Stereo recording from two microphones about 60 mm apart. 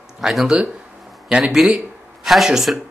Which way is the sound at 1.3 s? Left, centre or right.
Centre.